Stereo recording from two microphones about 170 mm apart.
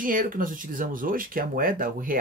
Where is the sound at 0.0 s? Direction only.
55° right (ahead or behind).